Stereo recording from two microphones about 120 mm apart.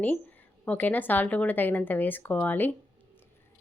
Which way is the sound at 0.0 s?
15° left (ahead or behind).